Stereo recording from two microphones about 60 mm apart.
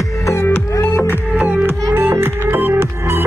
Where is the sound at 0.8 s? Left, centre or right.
Left.